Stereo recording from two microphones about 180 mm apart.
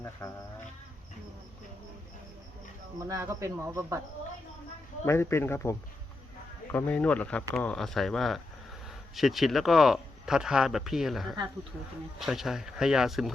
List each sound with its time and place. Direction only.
0.0 s speech: 15° left (ahead or behind)
3.1 s speech: 15° right (ahead or behind)
5.0 s speech: 15° left (ahead or behind); by 13.3 s centre (ahead or behind)